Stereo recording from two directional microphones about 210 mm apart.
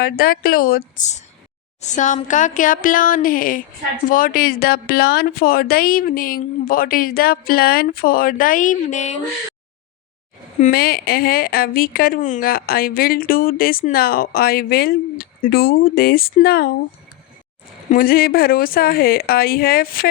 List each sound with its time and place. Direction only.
0.0 s a woman's voice: 45° left (ahead or behind)
10.6 s a woman's voice: 45° left (ahead or behind)
17.9 s a woman's voice: 45° left (ahead or behind)